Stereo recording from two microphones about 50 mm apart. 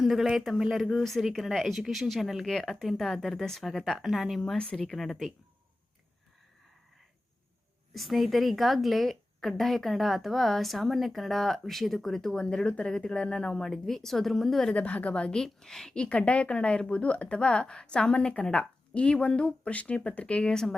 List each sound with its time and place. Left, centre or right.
0.0 s a woman's voice: centre
4.5 s speech: centre
4.8 s a woman's voice: centre
7.9 s a woman's voice: centre
14.7 s speech: left; by 16.0 s centre
16.0 s speech: left